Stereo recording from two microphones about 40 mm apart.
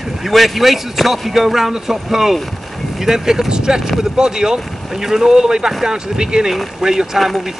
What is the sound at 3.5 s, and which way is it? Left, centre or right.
Vehicle, right.